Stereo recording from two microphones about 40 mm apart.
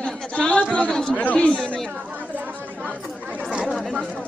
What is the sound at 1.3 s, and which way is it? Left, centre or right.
Speech, left.